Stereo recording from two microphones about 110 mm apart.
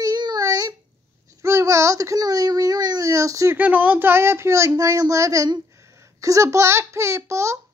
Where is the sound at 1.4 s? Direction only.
25° right (ahead or behind).